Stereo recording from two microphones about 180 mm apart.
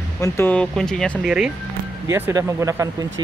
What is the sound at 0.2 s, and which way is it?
Speech, 10° left (ahead or behind).